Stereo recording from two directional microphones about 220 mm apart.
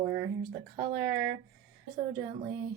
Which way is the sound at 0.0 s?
50° right (ahead or behind).